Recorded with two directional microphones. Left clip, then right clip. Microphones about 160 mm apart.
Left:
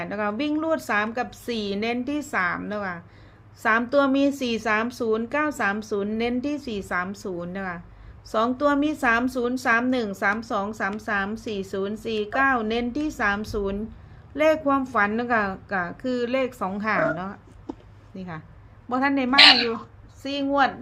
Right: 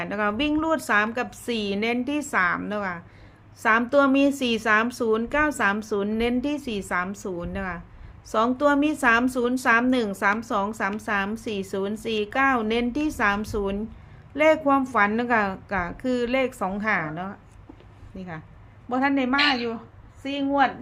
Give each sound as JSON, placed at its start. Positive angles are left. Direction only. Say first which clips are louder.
{"t": 0.0, "sound": "a woman's voice", "louder": "right 2 dB", "side_deg": -5}
{"t": 17.7, "sound": "a sound", "louder": "left 11 dB", "side_deg": 90}
{"t": 18.2, "sound": "a woman's voice", "louder": "even", "side_deg": 10}
{"t": 19.4, "sound": "a woman's voice", "louder": "left 11 dB", "side_deg": 90}
{"t": 20.2, "sound": "a woman's voice", "louder": "even", "side_deg": 15}